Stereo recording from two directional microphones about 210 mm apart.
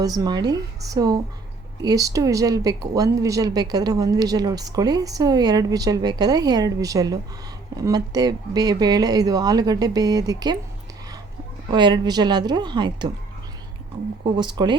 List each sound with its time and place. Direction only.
0.0 s speech: 15° right (ahead or behind)
11.7 s speech: 20° right (ahead or behind)
14.3 s speech: 20° right (ahead or behind)